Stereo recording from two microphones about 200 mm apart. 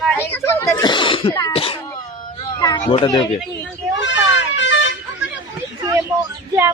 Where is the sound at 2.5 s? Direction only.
20° left (ahead or behind).